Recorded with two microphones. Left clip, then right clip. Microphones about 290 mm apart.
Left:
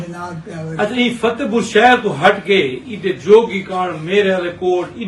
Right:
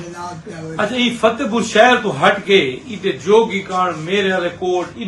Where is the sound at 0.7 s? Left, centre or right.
Centre.